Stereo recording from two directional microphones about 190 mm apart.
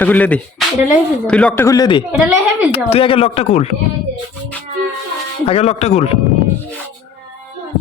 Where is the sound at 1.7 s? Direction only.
20° left (ahead or behind).